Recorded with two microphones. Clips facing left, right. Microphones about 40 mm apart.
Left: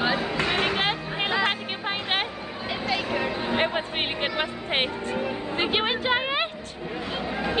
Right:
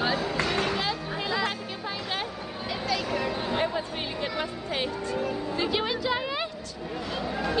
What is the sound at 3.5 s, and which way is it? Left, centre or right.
Music, left.